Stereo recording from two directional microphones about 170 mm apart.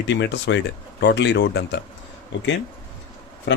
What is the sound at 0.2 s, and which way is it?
Speech, 90° left.